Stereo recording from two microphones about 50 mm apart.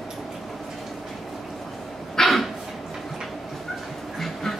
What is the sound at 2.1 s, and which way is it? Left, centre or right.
Dog, centre.